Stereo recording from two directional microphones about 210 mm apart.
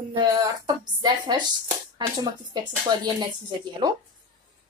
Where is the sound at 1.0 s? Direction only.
20° right (ahead or behind).